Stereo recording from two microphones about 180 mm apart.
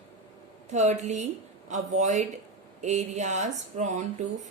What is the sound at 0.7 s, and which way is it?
A woman's voice, 40° right (ahead or behind).